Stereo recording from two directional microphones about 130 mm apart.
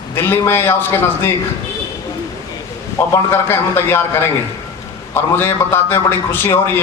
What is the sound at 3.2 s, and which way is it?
A man's voice, 20° left (ahead or behind).